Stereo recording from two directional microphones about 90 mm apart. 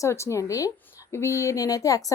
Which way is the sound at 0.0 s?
35° left (ahead or behind).